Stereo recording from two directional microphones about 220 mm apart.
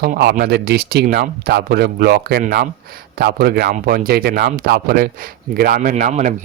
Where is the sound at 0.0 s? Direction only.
45° right (ahead or behind).